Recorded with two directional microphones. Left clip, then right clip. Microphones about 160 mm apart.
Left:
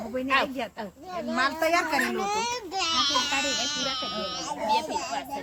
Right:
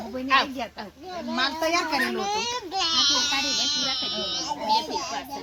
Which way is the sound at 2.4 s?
15° left (ahead or behind).